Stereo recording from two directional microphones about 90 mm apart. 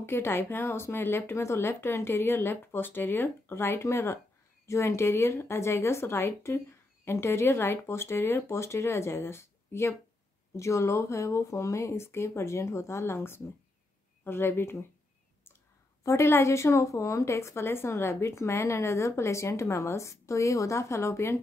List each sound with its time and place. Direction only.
0.0 s a woman's voice: 25° left (ahead or behind)
16.0 s a woman's voice: 30° left (ahead or behind)